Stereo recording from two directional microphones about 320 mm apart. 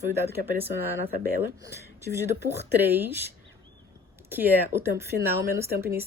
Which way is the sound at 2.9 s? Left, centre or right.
Centre.